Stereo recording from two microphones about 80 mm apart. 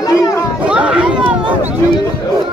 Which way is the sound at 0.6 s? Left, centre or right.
Centre.